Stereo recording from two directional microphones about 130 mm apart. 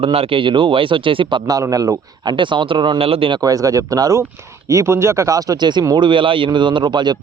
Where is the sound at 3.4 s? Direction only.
25° right (ahead or behind).